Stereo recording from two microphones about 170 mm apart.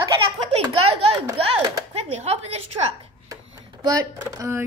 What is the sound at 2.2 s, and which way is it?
Speech, 40° right (ahead or behind).